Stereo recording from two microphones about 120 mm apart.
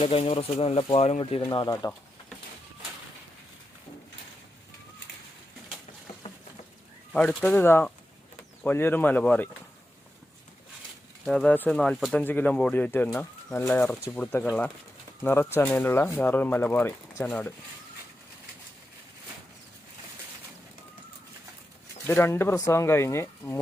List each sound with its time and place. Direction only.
0.0 s speech: 55° left (ahead or behind)
1.2 s speech: 40° left (ahead or behind)
6.2 s a sound: 55° left (ahead or behind)
7.1 s speech: 15° left (ahead or behind)
11.3 s speech: 5° left (ahead or behind)
22.0 s speech: 20° left (ahead or behind)